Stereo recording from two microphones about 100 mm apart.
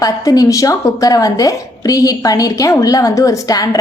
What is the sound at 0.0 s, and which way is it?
A woman's voice, 40° left (ahead or behind).